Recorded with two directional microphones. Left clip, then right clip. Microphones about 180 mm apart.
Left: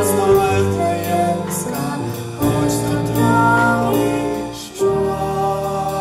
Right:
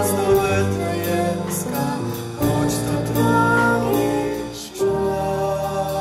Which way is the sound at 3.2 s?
25° right (ahead or behind).